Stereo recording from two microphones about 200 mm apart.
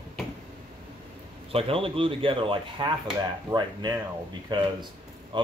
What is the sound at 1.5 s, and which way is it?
Speech, 30° right (ahead or behind).